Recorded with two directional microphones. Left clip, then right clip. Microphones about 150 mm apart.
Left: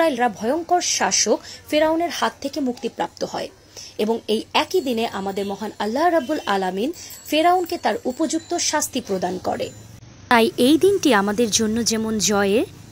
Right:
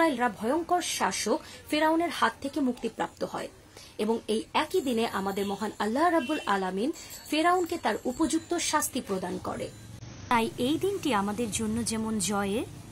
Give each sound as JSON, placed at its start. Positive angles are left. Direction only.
{"t": 0.0, "sound": "a woman's voice", "side_deg": 0}
{"t": 10.2, "sound": "a woman's voice", "side_deg": 35}